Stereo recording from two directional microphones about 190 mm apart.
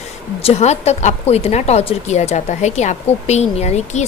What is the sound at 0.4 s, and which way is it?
A woman's voice, 35° left (ahead or behind).